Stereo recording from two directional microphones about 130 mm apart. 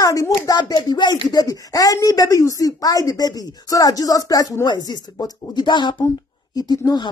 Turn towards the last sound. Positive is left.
turn(degrees=35)  # may be behind; listen again after turning